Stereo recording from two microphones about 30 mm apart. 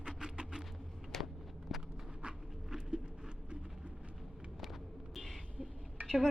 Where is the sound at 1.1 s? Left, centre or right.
Centre.